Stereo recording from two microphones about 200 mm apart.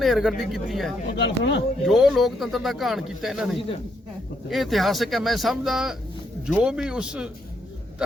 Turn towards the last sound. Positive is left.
turn(degrees=-5)  # may be behind; listen again after turning